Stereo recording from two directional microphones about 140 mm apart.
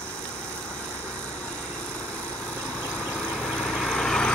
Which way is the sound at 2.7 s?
10° left (ahead or behind).